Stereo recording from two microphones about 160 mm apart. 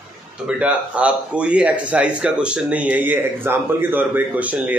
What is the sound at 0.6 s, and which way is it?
Speech, 10° right (ahead or behind).